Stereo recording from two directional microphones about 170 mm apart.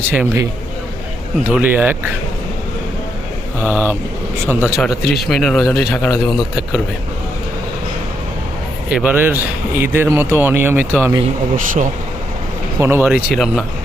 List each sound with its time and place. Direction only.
0.1 s speech: 10° right (ahead or behind)
1.5 s speech: 10° right (ahead or behind)
3.6 s speech: 10° right (ahead or behind)
4.8 s a man's voice: centre (ahead or behind)
8.9 s speech: 10° right (ahead or behind)
11.5 s speech: 55° right (ahead or behind)
12.8 s a man's voice: 15° right (ahead or behind)